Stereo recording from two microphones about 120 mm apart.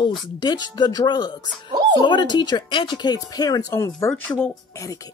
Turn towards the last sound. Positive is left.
turn(degrees=10)  # may be behind; listen again after turning